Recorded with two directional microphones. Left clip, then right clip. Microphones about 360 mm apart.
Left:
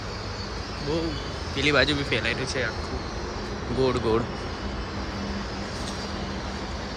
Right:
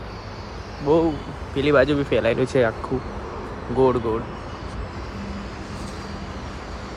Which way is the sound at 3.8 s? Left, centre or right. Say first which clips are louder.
Right 6 dB; centre.